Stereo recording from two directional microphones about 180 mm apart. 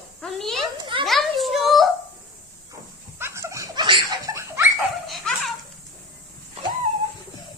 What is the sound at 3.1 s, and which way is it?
Dog, 15° right (ahead or behind).